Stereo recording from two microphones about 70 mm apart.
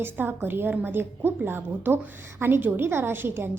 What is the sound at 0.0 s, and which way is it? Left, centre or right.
A woman's voice, right.